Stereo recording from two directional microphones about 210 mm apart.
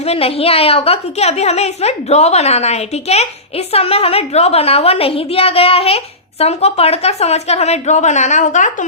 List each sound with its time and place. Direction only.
0.0 s a woman's voice: 30° left (ahead or behind)